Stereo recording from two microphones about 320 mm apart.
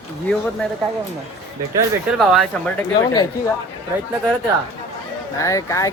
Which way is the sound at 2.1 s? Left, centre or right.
Centre.